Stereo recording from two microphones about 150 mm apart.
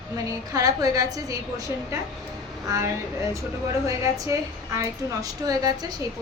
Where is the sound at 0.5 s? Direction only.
25° right (ahead or behind).